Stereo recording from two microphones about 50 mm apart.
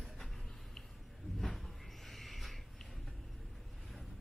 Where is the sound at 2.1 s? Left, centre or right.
Centre.